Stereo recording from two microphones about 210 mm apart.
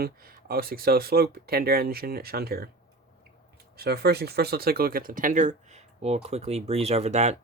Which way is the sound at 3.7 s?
50° right (ahead or behind).